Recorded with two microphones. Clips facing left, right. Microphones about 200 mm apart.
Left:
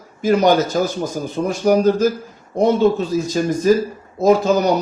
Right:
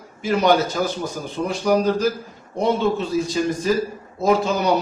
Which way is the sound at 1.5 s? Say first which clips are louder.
Left 4 dB; 45° left (ahead or behind).